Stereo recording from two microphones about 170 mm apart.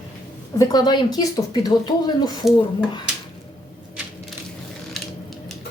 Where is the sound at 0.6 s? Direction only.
25° left (ahead or behind).